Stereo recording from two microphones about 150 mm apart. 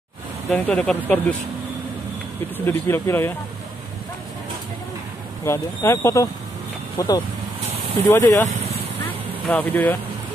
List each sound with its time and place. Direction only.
0.5 s speech: 10° left (ahead or behind)
2.5 s speech: 15° left (ahead or behind)
5.4 s speech: 20° left (ahead or behind)
8.5 s vehicle: 45° right (ahead or behind)
9.0 s vehicle: 10° left (ahead or behind)